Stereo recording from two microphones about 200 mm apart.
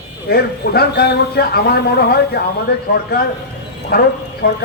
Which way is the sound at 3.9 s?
50° left (ahead or behind).